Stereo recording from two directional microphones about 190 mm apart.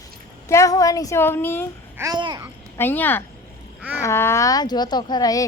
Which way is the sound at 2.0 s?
20° right (ahead or behind).